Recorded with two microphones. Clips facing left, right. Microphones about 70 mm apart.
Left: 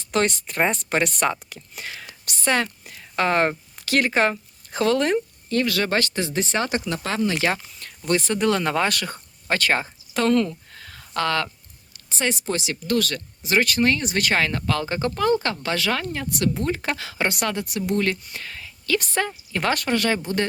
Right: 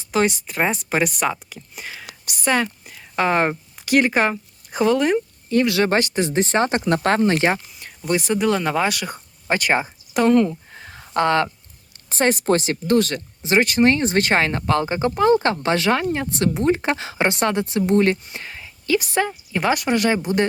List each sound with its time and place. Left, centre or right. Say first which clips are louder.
0.1 s a woman's voice: right 2 dB; centre
5.5 s speech: right 4 dB; right
6.8 s speech: right 7 dB; right
7.4 s speech: right 4 dB; centre
11.9 s speech: right 6 dB; right
12.9 s speech: right 5 dB; right